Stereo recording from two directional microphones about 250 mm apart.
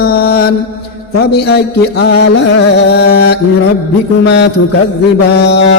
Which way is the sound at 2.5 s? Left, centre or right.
Left.